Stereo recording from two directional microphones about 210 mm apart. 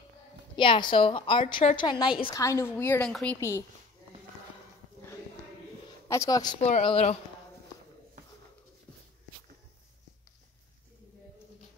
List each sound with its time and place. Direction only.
0.6 s a woman's voice: 25° left (ahead or behind); by 3.3 s centre (ahead or behind)
3.3 s a woman's voice: 15° left (ahead or behind)
6.0 s a woman's voice: 15° left (ahead or behind)